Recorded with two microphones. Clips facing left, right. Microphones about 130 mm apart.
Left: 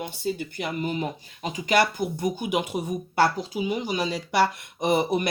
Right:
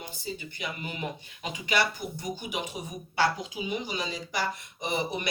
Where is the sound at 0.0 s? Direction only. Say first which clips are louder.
Left 9 dB; 50° left (ahead or behind).